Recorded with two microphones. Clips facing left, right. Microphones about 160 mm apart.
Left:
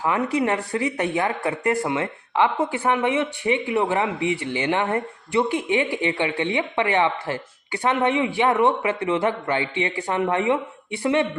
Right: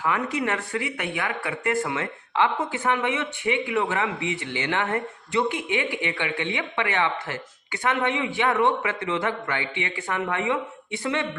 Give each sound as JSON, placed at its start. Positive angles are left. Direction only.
{"t": 0.0, "sound": "speech", "side_deg": 30}